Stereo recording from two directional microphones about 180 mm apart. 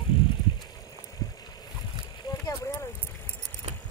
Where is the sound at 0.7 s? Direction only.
20° left (ahead or behind).